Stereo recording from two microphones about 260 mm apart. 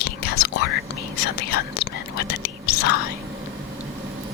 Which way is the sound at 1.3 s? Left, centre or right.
Left.